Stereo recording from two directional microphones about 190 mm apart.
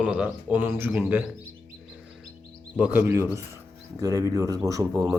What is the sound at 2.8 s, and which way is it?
Speech, 10° right (ahead or behind).